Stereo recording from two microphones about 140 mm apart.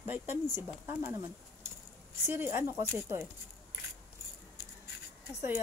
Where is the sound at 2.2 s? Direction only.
15° right (ahead or behind).